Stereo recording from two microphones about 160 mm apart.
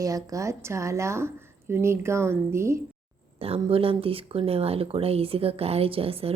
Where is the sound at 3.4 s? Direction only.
35° right (ahead or behind).